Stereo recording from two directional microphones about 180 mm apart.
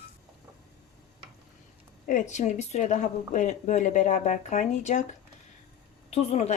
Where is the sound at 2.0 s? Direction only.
45° left (ahead or behind).